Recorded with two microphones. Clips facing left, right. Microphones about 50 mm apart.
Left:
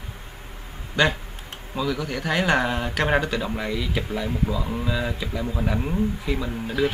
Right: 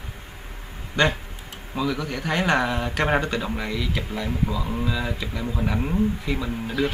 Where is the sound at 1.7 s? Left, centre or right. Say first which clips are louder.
Even; right.